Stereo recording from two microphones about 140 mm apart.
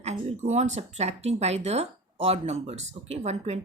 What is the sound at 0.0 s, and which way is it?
Speech, 50° right (ahead or behind).